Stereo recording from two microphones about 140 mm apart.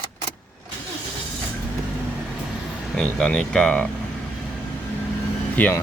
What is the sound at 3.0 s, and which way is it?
Speech, 5° left (ahead or behind).